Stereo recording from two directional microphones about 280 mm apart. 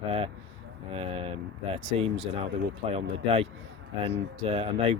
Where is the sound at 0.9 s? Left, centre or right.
Centre.